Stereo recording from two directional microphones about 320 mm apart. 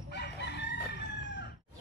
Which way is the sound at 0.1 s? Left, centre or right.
Left.